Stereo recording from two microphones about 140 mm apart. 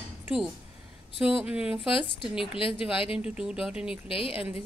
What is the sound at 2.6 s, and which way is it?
Speech, 40° left (ahead or behind).